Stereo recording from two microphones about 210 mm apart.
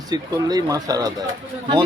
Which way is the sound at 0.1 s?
20° right (ahead or behind).